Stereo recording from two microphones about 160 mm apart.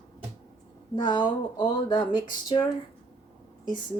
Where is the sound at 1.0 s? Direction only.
30° left (ahead or behind).